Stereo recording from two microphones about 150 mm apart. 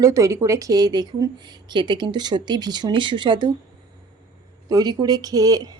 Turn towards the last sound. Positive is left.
turn(degrees=-25)  # may be behind; listen again after turning